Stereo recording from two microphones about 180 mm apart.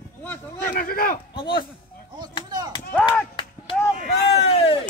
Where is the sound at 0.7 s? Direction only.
50° left (ahead or behind).